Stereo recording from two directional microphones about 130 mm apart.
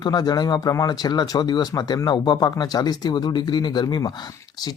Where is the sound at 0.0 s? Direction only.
30° left (ahead or behind).